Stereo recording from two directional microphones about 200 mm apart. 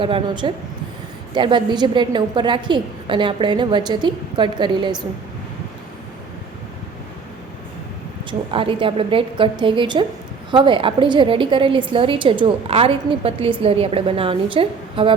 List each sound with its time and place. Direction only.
0.0 s a woman's voice: 25° right (ahead or behind)
8.3 s a woman's voice: 25° right (ahead or behind)